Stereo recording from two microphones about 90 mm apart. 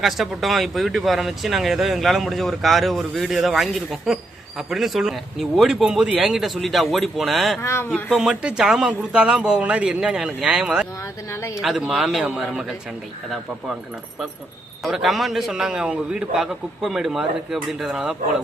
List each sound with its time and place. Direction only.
0.0 s speech: centre (ahead or behind)
7.6 s speech: 30° left (ahead or behind)
8.1 s a man's voice: 5° right (ahead or behind)
11.3 s speech: 35° left (ahead or behind)
11.6 s speech: 5° right (ahead or behind)
14.8 s speech: centre (ahead or behind)